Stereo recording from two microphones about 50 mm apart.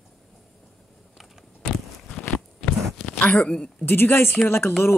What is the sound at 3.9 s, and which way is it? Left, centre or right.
Speech, left.